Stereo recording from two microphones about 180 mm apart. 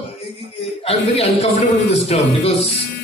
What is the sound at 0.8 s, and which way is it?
Speech, 35° left (ahead or behind).